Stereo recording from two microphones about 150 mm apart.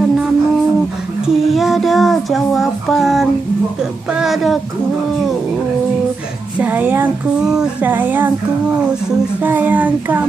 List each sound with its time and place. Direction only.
1.2 s child singing: centre (ahead or behind)
6.6 s speech: 10° right (ahead or behind)
9.4 s speech: 10° right (ahead or behind)